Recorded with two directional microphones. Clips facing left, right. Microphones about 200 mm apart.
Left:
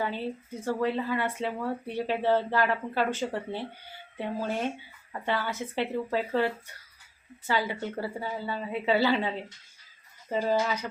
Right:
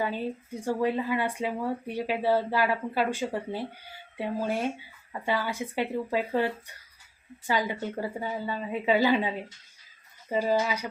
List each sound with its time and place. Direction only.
0.0 s speech: 15° right (ahead or behind)